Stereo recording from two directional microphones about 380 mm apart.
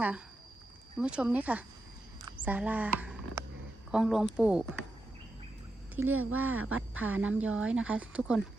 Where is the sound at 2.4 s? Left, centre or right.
Centre.